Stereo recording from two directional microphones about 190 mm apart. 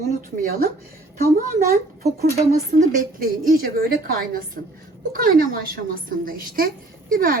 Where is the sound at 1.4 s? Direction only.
50° right (ahead or behind).